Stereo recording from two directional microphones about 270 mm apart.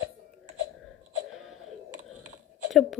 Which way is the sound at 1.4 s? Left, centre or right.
Centre.